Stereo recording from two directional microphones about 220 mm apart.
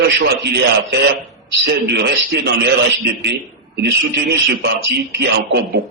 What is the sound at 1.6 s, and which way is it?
Speech, 45° right (ahead or behind).